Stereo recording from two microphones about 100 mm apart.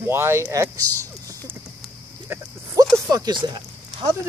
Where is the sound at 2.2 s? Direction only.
25° right (ahead or behind).